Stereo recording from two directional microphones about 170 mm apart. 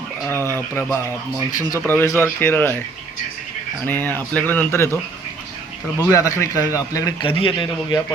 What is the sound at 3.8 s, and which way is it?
A man's voice, 10° left (ahead or behind).